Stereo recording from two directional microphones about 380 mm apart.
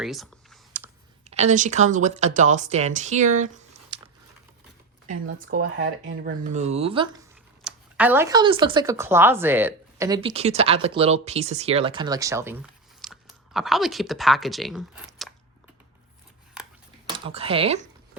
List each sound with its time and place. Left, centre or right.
0.0 s computer keyboard: centre
1.2 s speech: centre
5.2 s speech: right; by 15.3 s centre
17.1 s speech: centre